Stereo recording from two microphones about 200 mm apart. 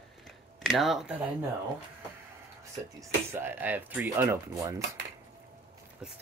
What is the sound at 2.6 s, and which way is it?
Speech, 15° right (ahead or behind).